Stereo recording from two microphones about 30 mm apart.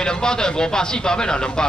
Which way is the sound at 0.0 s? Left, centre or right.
Left.